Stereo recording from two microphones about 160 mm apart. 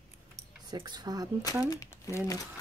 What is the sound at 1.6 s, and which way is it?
Speech, 20° left (ahead or behind).